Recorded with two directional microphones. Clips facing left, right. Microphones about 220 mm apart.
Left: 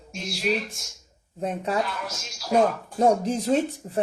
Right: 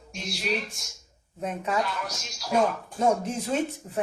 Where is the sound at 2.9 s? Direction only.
35° left (ahead or behind).